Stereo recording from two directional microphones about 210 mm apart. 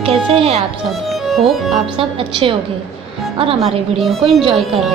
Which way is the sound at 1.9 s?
25° right (ahead or behind).